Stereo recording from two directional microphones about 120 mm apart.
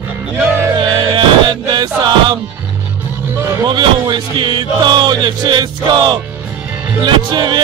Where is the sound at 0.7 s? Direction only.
40° right (ahead or behind).